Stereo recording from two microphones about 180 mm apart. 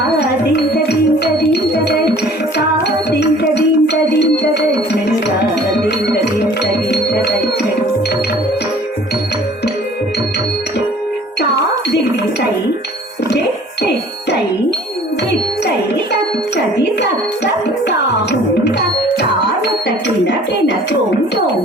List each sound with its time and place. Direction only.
1.7 s music: 65° left (ahead or behind)
6.9 s music: 65° left (ahead or behind)
16.7 s music: 70° left (ahead or behind)